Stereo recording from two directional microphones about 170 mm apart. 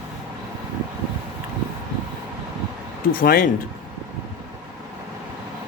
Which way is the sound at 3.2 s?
55° left (ahead or behind).